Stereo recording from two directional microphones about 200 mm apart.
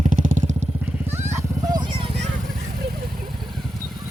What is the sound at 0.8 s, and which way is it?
Vehicle, 10° right (ahead or behind).